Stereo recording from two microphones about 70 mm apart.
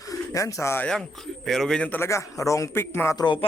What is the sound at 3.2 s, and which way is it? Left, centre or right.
Speech, left.